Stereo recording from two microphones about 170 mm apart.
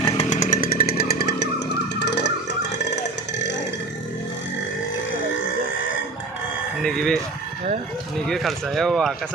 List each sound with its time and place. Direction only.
0.2 s chainsaw: 45° left (ahead or behind); by 3.6 s 90° left
6.8 s speech: 5° left (ahead or behind)
8.3 s speech: centre (ahead or behind)